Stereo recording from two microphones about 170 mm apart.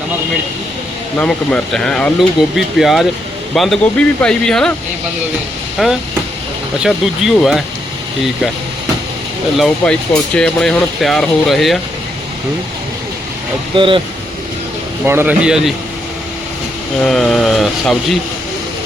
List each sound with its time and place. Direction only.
1.2 s speech: 5° left (ahead or behind)
5.8 s speech: centre (ahead or behind)
9.6 s speech: 5° left (ahead or behind)
13.7 s speech: 30° right (ahead or behind)
15.0 s a man's voice: 10° right (ahead or behind)
17.0 s speech: 5° left (ahead or behind)